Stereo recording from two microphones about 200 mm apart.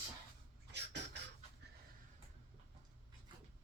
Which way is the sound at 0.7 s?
60° right (ahead or behind).